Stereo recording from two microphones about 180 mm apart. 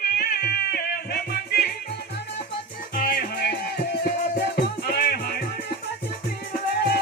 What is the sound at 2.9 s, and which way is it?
Music, 55° left (ahead or behind).